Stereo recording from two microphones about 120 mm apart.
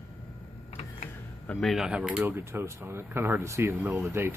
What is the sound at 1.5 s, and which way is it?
Speech, centre (ahead or behind).